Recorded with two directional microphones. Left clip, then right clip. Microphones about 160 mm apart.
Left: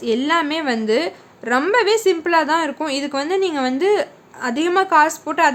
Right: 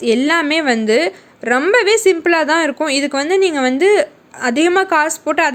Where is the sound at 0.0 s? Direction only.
30° right (ahead or behind).